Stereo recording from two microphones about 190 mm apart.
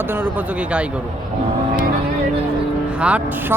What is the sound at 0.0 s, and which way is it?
Speech, 10° right (ahead or behind).